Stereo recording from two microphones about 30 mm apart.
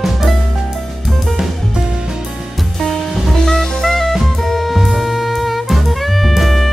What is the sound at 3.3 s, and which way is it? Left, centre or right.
Jazz, centre.